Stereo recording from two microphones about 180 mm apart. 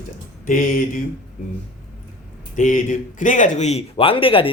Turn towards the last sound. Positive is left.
turn(degrees=30)  # may be behind; listen again after turning